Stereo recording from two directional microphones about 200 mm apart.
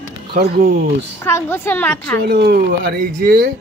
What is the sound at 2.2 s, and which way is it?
A man's voice, 55° right (ahead or behind).